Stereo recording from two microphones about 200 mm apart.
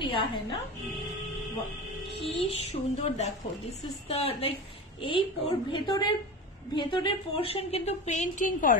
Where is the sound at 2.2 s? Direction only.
30° left (ahead or behind).